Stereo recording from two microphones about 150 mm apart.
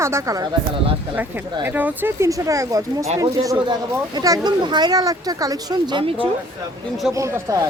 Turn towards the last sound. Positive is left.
turn(degrees=-20)  # may be behind; listen again after turning